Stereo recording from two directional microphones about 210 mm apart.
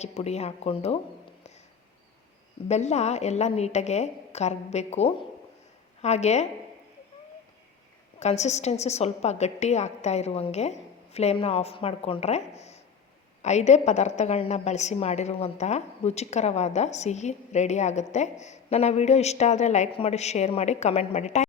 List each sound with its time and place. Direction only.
0.0 s a woman's voice: 30° left (ahead or behind)
2.6 s a woman's voice: 30° left (ahead or behind)
8.2 s a woman's voice: 30° left (ahead or behind)